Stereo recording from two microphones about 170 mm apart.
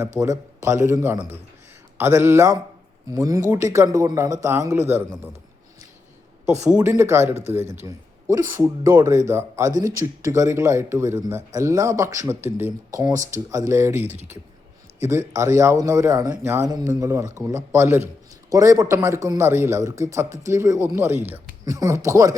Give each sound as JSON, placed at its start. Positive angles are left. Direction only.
{"t": 0.2, "sound": "a man's voice", "side_deg": -15}
{"t": 6.7, "sound": "a man's voice", "side_deg": -15}
{"t": 15.3, "sound": "a man's voice", "side_deg": -15}